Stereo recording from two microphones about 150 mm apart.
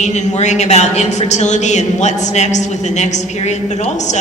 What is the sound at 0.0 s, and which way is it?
A woman's voice, 50° left (ahead or behind).